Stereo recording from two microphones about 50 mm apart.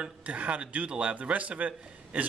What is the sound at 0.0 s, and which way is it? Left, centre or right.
A man's voice, right.